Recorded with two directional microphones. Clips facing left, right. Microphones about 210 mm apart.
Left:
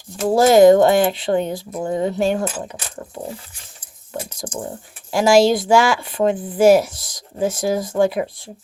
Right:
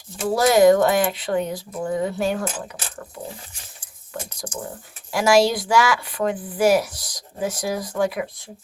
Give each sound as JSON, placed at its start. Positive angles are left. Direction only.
{"t": 0.3, "sound": "speech", "side_deg": 25}
{"t": 5.1, "sound": "speech", "side_deg": 25}